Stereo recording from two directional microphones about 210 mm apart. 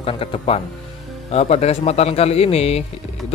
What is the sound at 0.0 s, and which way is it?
A man's voice, 25° left (ahead or behind).